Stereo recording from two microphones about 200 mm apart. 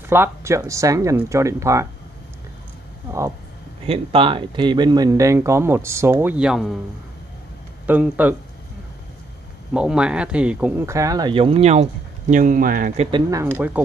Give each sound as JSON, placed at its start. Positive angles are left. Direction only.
{"t": 0.1, "sound": "speech", "side_deg": -15}
{"t": 3.1, "sound": "speech", "side_deg": -15}
{"t": 3.8, "sound": "speech", "side_deg": -30}
{"t": 7.8, "sound": "speech", "side_deg": -10}
{"t": 9.8, "sound": "speech", "side_deg": -5}
{"t": 13.3, "sound": "speech", "side_deg": -15}